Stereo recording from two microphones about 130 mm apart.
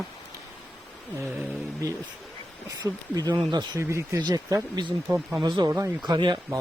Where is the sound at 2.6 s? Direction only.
30° right (ahead or behind).